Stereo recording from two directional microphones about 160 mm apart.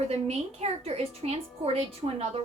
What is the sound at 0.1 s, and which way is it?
A child's voice, 40° right (ahead or behind).